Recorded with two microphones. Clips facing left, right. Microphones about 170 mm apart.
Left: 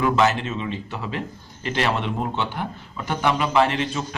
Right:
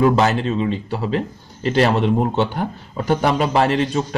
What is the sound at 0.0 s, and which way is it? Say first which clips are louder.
A man's voice: right 4 dB; 35° right (ahead or behind).